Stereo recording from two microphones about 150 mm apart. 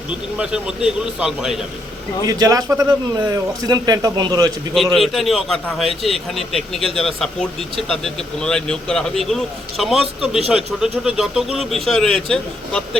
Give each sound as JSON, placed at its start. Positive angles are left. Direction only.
{"t": 0.3, "sound": "speech", "side_deg": -5}
{"t": 2.2, "sound": "a man's voice", "side_deg": -25}
{"t": 4.7, "sound": "speech", "side_deg": 0}